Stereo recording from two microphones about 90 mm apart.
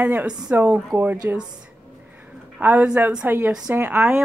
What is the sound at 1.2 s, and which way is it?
Speech, 25° right (ahead or behind).